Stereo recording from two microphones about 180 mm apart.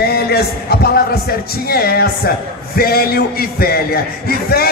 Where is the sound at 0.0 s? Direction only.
60° left (ahead or behind).